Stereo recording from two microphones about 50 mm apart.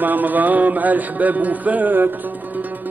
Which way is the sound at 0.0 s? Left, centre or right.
Right.